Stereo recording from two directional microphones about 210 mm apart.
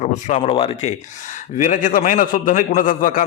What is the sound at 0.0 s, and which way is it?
A man's voice, 35° left (ahead or behind).